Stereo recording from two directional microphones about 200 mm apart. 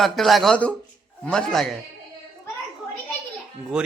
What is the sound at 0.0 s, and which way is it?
A man's voice, centre (ahead or behind).